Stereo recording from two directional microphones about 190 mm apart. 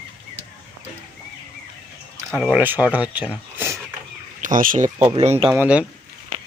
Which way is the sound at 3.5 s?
15° right (ahead or behind).